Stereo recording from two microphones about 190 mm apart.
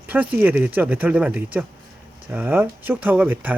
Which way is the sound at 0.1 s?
10° right (ahead or behind).